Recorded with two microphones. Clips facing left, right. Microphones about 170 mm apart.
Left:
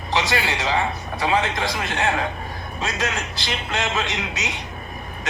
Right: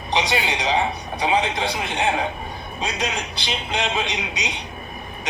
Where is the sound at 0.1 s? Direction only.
20° right (ahead or behind).